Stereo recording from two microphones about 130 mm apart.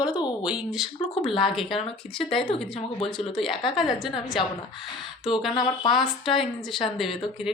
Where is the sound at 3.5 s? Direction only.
40° left (ahead or behind).